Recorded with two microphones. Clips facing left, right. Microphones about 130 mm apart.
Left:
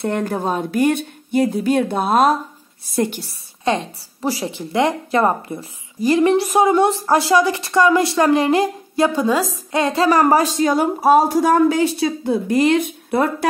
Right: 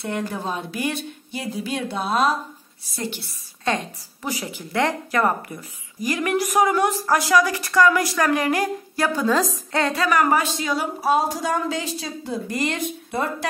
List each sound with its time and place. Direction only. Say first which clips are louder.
0.0 s speech: left 6 dB; 50° left (ahead or behind)
4.2 s a woman's voice: left 7 dB; 35° left (ahead or behind)
9.3 s a woman's voice: left 2 dB; 5° left (ahead or behind)
9.7 s a woman's voice: left 8 dB; 20° left (ahead or behind); by 13.3 s 60° left (ahead or behind)